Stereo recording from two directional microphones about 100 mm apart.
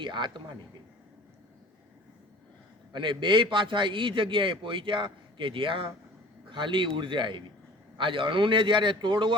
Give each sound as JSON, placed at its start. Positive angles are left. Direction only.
{"t": 0.0, "sound": "speech", "side_deg": -50}
{"t": 2.9, "sound": "a man's voice", "side_deg": -55}